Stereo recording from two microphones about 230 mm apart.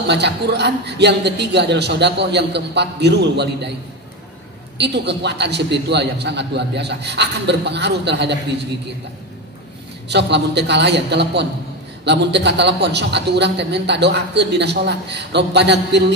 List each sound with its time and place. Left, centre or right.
0.0 s a man's voice: right
4.7 s a man's voice: right
10.0 s a man's voice: right